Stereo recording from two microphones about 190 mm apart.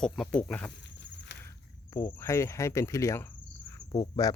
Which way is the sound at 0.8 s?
65° left (ahead or behind).